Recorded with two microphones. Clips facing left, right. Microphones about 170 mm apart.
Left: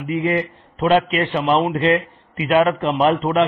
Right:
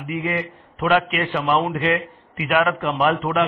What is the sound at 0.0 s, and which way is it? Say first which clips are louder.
A man's voice: left 5 dB; 30° left (ahead or behind).